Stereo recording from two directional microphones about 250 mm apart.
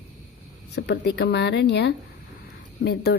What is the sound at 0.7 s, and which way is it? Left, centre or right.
A woman's voice, left.